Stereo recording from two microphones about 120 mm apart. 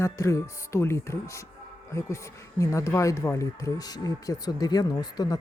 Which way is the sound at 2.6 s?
25° left (ahead or behind).